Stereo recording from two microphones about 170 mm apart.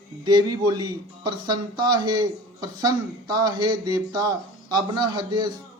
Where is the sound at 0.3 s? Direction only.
25° right (ahead or behind).